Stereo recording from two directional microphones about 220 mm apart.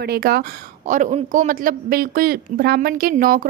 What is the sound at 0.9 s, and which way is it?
Speech, 35° right (ahead or behind).